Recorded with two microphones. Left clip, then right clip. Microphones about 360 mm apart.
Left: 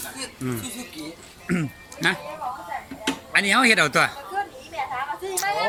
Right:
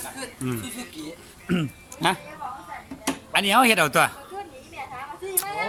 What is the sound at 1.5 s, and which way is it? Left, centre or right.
Speech, centre.